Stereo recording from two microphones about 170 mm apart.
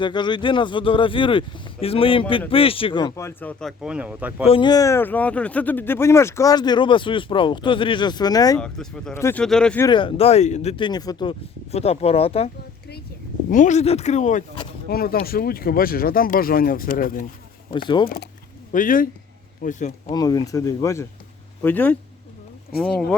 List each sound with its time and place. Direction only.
0.0 s speech: 25° left (ahead or behind)
3.2 s speech: 15° left (ahead or behind)
3.6 s speech: centre (ahead or behind)
4.4 s speech: 30° left (ahead or behind)
8.5 s speech: 5° left (ahead or behind)
9.1 s speech: 15° left (ahead or behind)
9.4 s speech: 5° left (ahead or behind)
9.8 s speech: 30° left (ahead or behind)
11.7 s speech: 35° left (ahead or behind)
13.5 s speech: 45° left (ahead or behind)
14.8 s speech: 60° left (ahead or behind)
17.7 s speech: 30° left (ahead or behind)
18.7 s speech: 50° left (ahead or behind)
20.1 s speech: 20° left (ahead or behind); by 23.1 s 5° left (ahead or behind)